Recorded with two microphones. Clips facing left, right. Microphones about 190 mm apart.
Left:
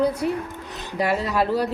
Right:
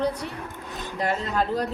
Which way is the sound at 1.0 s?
10° left (ahead or behind).